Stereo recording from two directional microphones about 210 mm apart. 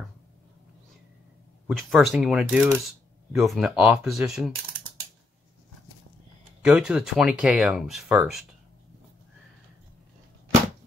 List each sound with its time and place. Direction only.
1.7 s speech: centre (ahead or behind)
6.6 s speech: 5° right (ahead or behind)